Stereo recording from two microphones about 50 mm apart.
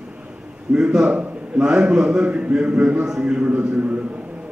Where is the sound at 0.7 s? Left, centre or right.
Centre.